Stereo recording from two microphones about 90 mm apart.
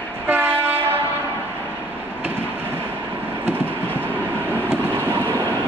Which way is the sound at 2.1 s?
25° right (ahead or behind).